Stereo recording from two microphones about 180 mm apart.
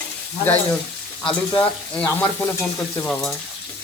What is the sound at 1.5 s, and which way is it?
Stir, 10° left (ahead or behind).